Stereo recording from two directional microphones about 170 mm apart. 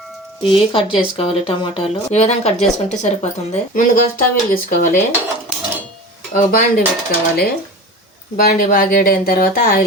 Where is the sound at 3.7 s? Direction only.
55° left (ahead or behind).